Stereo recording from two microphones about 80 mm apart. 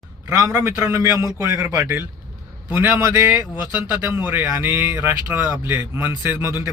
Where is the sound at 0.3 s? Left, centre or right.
Right.